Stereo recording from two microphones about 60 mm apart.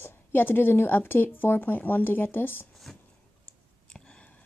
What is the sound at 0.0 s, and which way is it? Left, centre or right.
Speech, left.